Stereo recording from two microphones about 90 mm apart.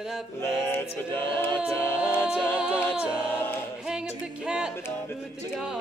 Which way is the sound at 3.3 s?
25° left (ahead or behind).